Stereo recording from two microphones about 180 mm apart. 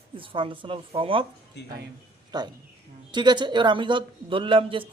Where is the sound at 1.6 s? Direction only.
75° left (ahead or behind).